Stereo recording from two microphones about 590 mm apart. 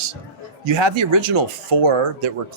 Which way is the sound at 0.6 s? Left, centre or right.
Right.